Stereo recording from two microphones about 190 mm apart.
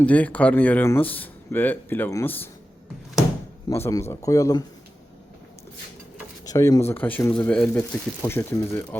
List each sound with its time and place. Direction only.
0.0 s speech: 10° left (ahead or behind)
3.7 s speech: 15° left (ahead or behind)
6.4 s speech: 20° left (ahead or behind)